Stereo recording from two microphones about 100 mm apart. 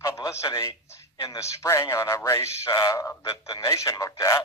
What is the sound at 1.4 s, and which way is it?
Speech, 30° left (ahead or behind).